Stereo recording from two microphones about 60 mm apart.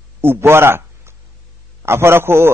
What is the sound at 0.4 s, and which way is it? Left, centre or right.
A man's voice, right.